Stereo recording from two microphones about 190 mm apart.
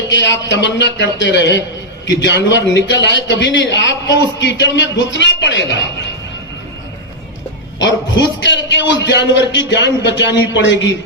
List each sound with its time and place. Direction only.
0.1 s a man's voice: 75° left (ahead or behind)
7.8 s a man's voice: 70° left (ahead or behind)